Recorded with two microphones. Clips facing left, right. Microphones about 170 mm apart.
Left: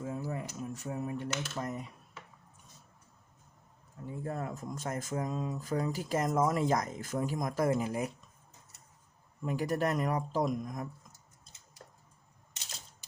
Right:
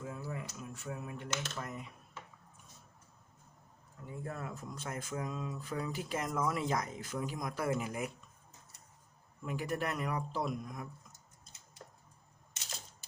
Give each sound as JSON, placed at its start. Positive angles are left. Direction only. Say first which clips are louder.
{"t": 0.0, "sound": "speech", "louder": "left 5 dB", "side_deg": 35}
{"t": 4.0, "sound": "speech", "louder": "left 5 dB", "side_deg": 35}
{"t": 9.4, "sound": "speech", "louder": "left 5 dB", "side_deg": 40}